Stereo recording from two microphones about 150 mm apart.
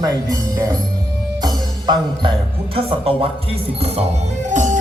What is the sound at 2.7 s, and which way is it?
Speech, 35° right (ahead or behind).